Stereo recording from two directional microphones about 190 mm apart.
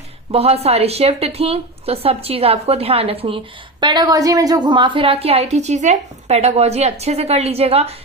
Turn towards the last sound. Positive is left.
turn(degrees=-30)  # may be behind; listen again after turning